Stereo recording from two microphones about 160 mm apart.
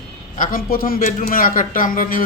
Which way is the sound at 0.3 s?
60° left (ahead or behind).